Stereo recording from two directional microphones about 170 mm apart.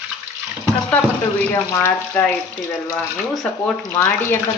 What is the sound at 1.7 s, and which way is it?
A woman's voice, 10° left (ahead or behind).